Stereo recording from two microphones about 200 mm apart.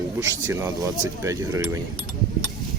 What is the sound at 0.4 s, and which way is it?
Speech, 15° right (ahead or behind).